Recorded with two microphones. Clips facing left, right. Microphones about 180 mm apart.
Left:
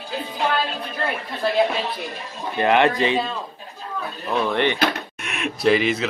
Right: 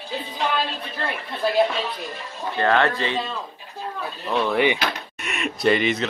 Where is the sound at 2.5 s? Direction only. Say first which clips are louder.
Left 3 dB; 15° left (ahead or behind).